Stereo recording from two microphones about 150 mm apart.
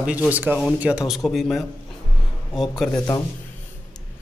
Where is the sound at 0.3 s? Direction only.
10° right (ahead or behind).